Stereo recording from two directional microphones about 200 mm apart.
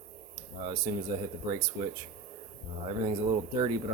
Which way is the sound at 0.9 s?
20° right (ahead or behind).